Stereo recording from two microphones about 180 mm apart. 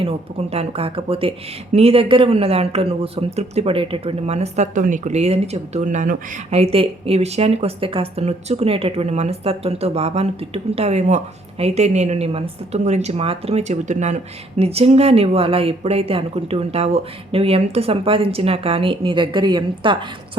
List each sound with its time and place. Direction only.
0.0 s speech: 35° right (ahead or behind)